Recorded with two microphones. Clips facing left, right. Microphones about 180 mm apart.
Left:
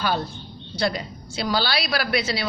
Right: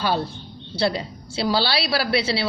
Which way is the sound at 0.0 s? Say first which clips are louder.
Right 2 dB; 30° right (ahead or behind).